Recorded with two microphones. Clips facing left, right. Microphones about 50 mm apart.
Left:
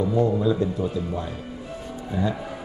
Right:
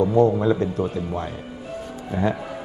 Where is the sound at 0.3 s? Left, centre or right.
Right.